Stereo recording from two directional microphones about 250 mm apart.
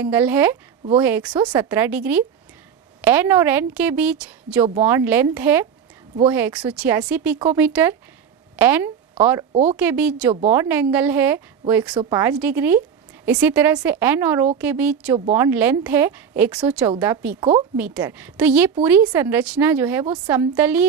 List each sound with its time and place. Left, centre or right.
0.0 s speech: centre
9.5 s speech: right
9.8 s speech: centre